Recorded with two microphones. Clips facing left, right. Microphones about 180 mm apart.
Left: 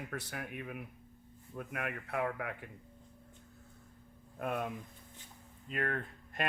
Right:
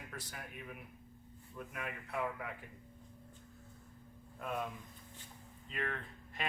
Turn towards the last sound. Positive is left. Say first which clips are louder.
# left 6 dB
turn(degrees=50)  # may be behind; listen again after turning